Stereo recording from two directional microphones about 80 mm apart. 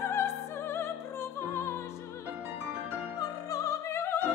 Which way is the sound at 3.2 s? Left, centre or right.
Left.